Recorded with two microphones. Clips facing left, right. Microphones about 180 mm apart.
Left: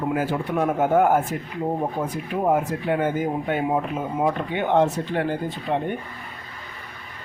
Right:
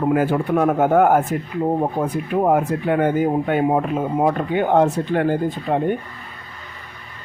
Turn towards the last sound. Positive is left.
turn(degrees=-45)  # may be behind; listen again after turning